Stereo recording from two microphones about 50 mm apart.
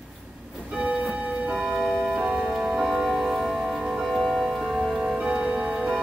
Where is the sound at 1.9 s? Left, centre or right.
Centre.